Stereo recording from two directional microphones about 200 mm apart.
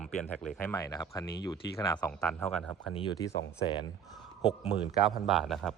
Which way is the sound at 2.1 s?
5° left (ahead or behind).